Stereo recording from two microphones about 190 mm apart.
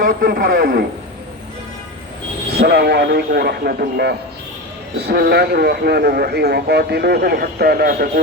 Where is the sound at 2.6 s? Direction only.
60° right (ahead or behind).